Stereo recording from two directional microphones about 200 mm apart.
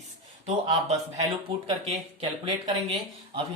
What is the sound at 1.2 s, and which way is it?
Speech, 25° right (ahead or behind).